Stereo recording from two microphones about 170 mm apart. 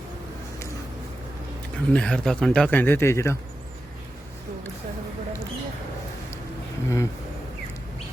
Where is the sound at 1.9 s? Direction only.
5° left (ahead or behind).